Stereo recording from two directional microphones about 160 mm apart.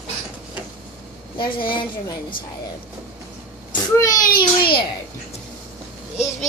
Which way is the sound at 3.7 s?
20° left (ahead or behind).